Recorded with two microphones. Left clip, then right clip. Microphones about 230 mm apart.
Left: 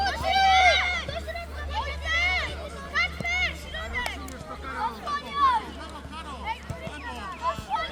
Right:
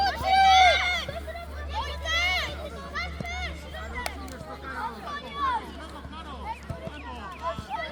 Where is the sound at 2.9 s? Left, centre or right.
Left.